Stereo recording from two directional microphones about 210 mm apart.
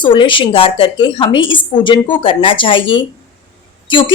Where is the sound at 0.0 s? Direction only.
25° left (ahead or behind).